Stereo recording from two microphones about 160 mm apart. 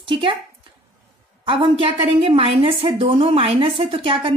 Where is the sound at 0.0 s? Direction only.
30° right (ahead or behind).